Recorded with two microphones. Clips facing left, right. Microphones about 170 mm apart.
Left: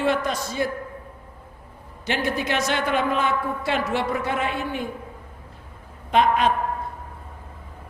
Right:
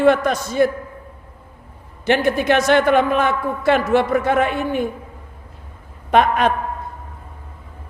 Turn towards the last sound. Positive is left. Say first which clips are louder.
# right 3 dB
turn(degrees=-60)  # may be behind; listen again after turning